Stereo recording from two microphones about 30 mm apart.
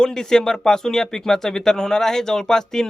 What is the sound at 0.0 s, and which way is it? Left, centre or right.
Speech, left.